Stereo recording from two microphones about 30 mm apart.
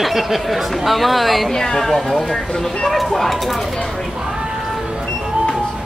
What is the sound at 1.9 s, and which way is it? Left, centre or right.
Speech, centre.